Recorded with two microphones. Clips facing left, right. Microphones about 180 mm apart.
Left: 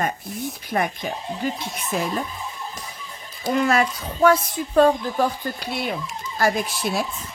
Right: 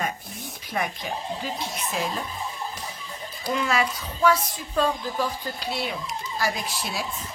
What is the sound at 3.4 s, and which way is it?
Speech, 50° left (ahead or behind).